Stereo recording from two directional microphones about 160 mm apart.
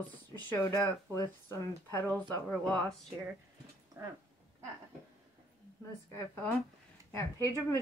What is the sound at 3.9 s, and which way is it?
Speech, 15° right (ahead or behind).